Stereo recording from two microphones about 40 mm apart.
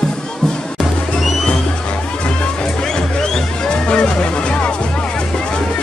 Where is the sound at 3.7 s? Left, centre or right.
Left.